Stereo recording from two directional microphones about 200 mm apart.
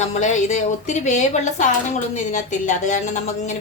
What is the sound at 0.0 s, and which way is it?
A woman's voice, 35° left (ahead or behind).